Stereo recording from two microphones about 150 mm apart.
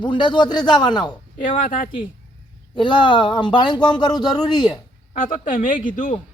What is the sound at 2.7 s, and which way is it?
A man's voice, 30° left (ahead or behind).